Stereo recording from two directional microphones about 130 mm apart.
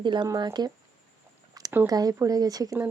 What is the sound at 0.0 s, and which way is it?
Speech, 35° right (ahead or behind).